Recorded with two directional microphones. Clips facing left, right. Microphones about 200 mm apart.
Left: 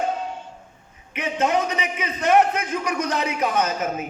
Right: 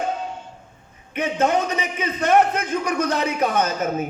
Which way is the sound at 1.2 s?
30° right (ahead or behind).